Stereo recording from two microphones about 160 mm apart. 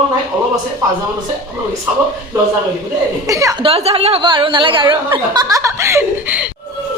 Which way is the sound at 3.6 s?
40° right (ahead or behind).